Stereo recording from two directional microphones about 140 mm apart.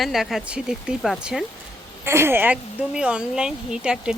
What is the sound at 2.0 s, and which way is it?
Speech, 20° right (ahead or behind).